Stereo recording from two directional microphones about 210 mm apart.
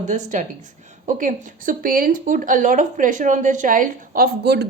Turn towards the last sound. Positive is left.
turn(degrees=-50)  # may be behind; listen again after turning